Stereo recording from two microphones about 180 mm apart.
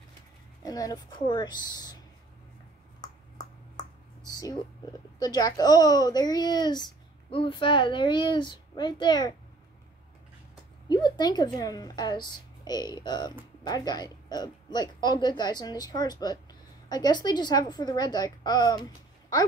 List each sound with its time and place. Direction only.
0.6 s speech: 20° left (ahead or behind)
3.7 s a sound: 20° left (ahead or behind)
5.2 s speech: 20° left (ahead or behind)
10.5 s a woman's voice: 25° left (ahead or behind)